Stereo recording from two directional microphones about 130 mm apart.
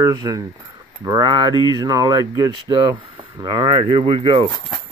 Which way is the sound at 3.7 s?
50° right (ahead or behind).